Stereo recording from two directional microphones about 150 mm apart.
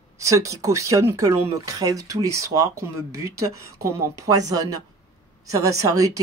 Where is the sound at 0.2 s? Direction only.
20° right (ahead or behind).